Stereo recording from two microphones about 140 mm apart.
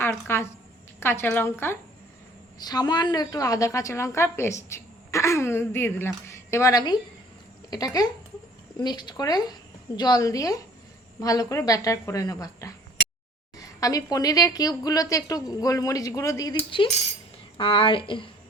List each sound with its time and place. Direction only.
0.0 s a woman's voice: 15° left (ahead or behind)
2.6 s a woman's voice: 30° left (ahead or behind)
17.6 s a woman's voice: 40° left (ahead or behind)